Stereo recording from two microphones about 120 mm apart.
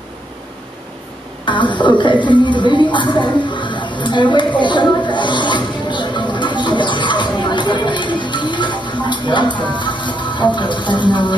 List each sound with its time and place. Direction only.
1.7 s speech: 40° left (ahead or behind)